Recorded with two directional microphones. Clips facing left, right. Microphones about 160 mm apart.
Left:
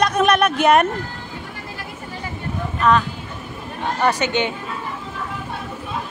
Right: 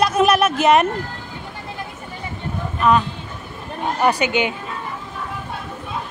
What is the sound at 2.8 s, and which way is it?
A woman's voice, 10° right (ahead or behind).